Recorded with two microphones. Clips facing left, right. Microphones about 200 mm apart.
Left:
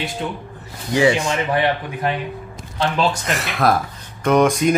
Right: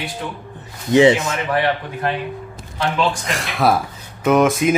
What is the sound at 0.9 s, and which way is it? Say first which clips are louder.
Speech: right 4 dB; 20° right (ahead or behind).